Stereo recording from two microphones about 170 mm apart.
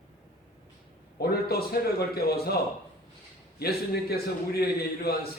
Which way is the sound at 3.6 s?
65° left (ahead or behind).